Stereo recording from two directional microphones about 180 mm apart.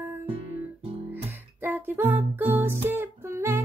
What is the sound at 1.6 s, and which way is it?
Music, 10° right (ahead or behind).